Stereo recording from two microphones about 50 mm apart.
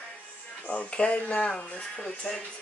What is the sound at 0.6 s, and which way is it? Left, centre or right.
Speech, left.